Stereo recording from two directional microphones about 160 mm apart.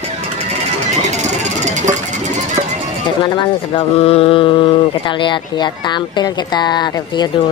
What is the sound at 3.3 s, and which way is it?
Speech, 30° left (ahead or behind).